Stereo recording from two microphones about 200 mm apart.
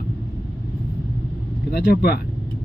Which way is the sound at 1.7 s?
50° left (ahead or behind).